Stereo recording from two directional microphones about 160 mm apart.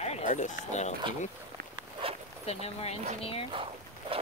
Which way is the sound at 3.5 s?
35° right (ahead or behind).